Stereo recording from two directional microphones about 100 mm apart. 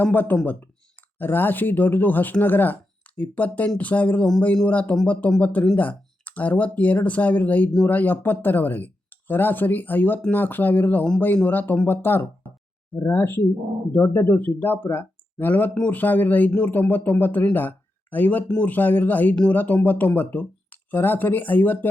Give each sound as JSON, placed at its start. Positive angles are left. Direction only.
{"t": 0.0, "sound": "speech", "side_deg": 20}